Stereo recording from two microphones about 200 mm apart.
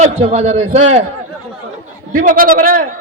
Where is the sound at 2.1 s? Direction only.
45° right (ahead or behind).